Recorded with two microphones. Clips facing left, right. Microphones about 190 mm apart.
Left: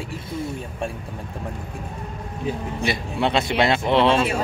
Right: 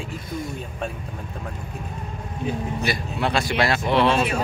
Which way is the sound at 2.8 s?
25° left (ahead or behind).